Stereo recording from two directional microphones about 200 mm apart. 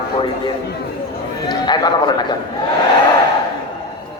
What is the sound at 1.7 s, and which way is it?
Speech, 20° left (ahead or behind).